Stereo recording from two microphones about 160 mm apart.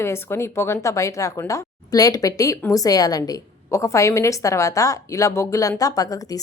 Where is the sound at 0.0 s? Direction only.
15° left (ahead or behind).